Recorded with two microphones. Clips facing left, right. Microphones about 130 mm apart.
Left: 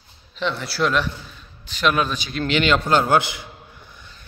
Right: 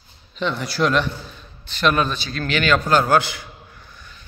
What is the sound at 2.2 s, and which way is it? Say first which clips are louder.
A man's voice: left 2 dB; 20° left (ahead or behind).